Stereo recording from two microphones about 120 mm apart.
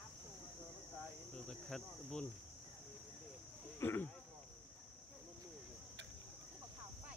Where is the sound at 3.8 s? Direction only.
20° left (ahead or behind).